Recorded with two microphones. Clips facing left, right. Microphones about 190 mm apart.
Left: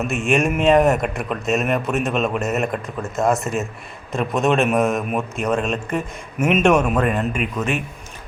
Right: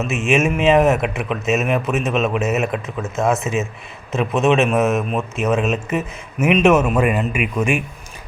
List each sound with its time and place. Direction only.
0.1 s speech: centre (ahead or behind)